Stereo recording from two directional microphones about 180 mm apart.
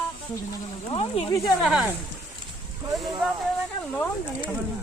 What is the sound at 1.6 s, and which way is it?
Speech, centre (ahead or behind).